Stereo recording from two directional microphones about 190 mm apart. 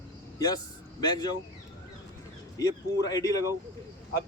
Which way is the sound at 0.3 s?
20° left (ahead or behind).